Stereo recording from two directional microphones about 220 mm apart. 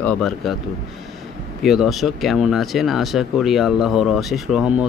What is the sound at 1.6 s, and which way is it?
Speech, centre (ahead or behind).